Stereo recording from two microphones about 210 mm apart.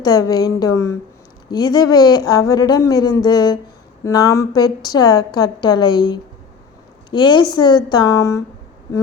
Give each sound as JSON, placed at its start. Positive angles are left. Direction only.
{"t": 0.0, "sound": "a woman's voice", "side_deg": 20}